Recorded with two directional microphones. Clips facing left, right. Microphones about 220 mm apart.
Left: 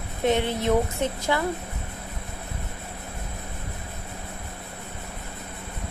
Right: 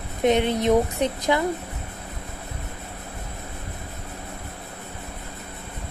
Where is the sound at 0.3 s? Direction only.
20° right (ahead or behind).